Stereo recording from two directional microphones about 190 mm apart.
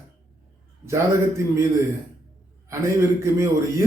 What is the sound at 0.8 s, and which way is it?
A man's voice, 15° right (ahead or behind).